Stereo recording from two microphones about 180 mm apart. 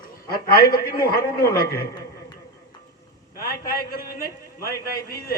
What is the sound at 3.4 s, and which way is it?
A man's voice, 55° left (ahead or behind).